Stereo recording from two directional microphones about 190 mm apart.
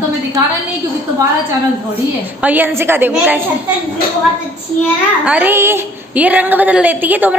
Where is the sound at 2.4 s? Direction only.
10° right (ahead or behind).